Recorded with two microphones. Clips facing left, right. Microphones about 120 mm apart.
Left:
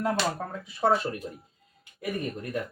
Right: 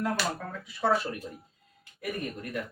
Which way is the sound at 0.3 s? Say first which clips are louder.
Left 4 dB; 40° left (ahead or behind).